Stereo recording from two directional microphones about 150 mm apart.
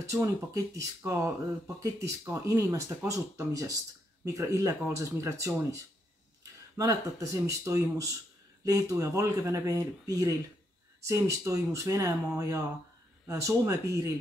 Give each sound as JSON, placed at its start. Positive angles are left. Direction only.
{"t": 0.1, "sound": "speech", "side_deg": -20}
{"t": 6.8, "sound": "speech", "side_deg": -20}